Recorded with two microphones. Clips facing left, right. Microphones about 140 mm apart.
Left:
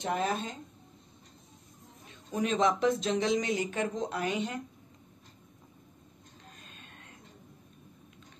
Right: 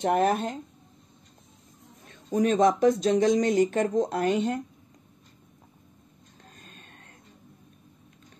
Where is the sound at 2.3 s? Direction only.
45° right (ahead or behind).